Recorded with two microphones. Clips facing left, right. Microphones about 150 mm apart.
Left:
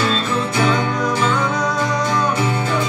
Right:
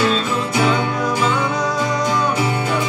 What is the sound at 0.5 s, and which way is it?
Music, 10° right (ahead or behind).